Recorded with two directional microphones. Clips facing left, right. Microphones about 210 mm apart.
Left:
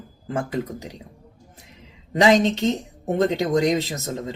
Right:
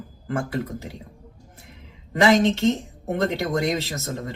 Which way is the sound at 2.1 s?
20° left (ahead or behind).